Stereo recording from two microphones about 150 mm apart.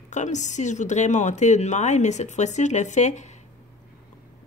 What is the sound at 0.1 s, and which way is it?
A woman's voice, 55° left (ahead or behind).